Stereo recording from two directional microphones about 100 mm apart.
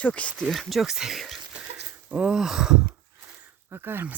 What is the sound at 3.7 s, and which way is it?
Speech, 25° right (ahead or behind).